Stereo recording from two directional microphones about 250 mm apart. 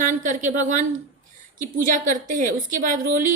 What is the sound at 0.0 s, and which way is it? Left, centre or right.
A woman's voice, right.